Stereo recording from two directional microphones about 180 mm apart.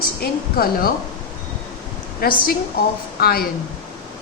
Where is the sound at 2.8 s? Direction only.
55° left (ahead or behind).